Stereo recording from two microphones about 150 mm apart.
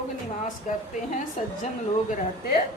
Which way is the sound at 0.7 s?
55° left (ahead or behind).